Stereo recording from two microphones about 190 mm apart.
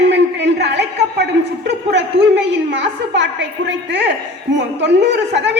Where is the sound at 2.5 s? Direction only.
65° right (ahead or behind).